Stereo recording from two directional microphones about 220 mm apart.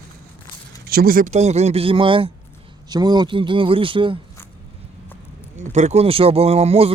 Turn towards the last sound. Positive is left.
turn(degrees=-30)  # may be behind; listen again after turning